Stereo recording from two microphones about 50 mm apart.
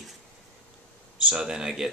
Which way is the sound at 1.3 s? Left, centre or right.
Centre.